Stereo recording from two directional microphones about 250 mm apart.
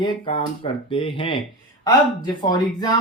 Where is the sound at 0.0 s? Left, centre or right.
Left.